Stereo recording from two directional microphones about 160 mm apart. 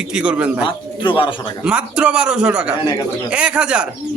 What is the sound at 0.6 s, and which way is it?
Speech, 30° left (ahead or behind).